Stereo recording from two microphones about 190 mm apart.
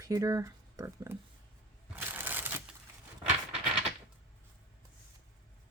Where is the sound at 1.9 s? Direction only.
10° right (ahead or behind).